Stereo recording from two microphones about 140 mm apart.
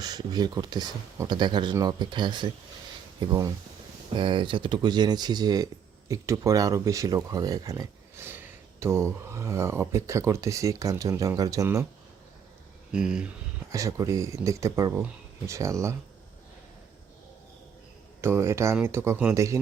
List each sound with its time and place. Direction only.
0.0 s speech: 30° right (ahead or behind)
12.9 s speech: 5° right (ahead or behind)
13.7 s speech: 20° right (ahead or behind)
18.2 s speech: 20° right (ahead or behind)